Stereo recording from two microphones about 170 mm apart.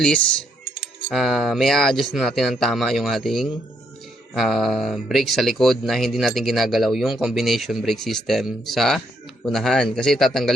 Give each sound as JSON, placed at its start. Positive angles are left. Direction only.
{"t": 1.1, "sound": "speech", "side_deg": 0}